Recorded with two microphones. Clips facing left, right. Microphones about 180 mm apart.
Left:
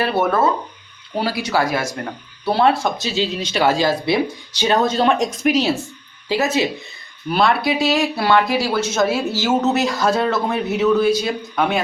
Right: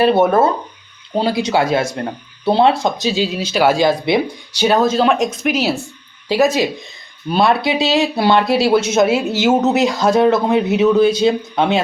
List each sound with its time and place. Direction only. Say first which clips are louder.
0.0 s speech: right 5 dB; 20° right (ahead or behind)
4.6 s speech: right 3 dB; 5° right (ahead or behind)
6.2 s speech: right 4 dB; 15° right (ahead or behind)